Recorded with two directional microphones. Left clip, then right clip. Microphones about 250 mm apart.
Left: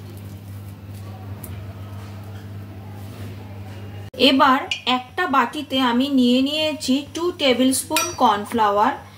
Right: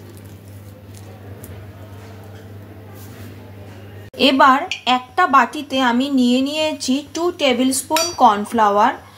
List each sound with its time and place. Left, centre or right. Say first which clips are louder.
4.2 s speech: right 3 dB; right